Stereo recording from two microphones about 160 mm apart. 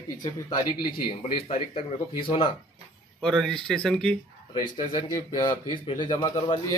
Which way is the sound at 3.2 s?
5° left (ahead or behind).